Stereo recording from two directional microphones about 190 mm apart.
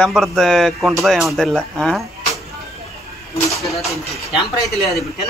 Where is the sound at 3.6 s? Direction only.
Centre (ahead or behind).